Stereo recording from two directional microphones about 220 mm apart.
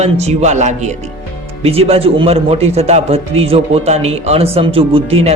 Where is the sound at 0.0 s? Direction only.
30° right (ahead or behind).